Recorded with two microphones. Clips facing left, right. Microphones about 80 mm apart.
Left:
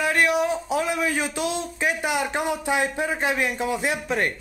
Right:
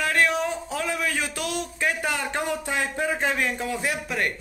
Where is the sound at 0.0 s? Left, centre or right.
Centre.